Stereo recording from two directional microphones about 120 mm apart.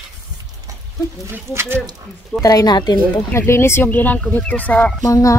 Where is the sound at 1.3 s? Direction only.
20° right (ahead or behind).